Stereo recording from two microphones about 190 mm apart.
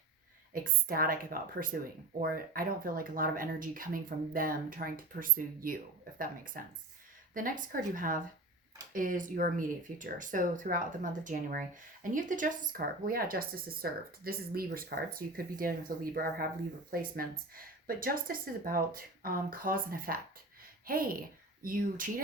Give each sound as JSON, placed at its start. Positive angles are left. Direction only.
{"t": 0.5, "sound": "speech", "side_deg": -50}
{"t": 16.9, "sound": "speech", "side_deg": -50}